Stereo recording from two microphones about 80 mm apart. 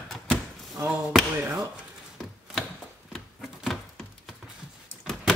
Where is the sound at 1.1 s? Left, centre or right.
Centre.